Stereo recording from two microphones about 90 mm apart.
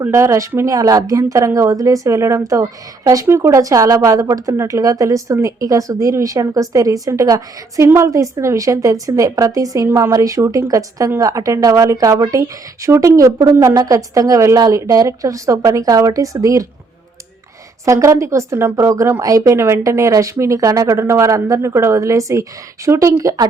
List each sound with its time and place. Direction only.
0.0 s a woman's voice: 30° right (ahead or behind)
17.8 s a woman's voice: 35° right (ahead or behind)